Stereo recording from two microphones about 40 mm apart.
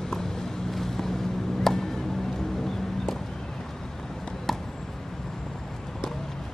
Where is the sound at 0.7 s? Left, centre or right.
Centre.